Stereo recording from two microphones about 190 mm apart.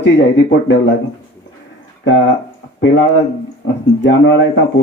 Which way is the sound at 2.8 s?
70° left (ahead or behind).